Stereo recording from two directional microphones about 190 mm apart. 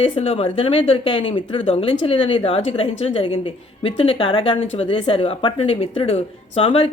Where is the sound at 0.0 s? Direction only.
35° left (ahead or behind).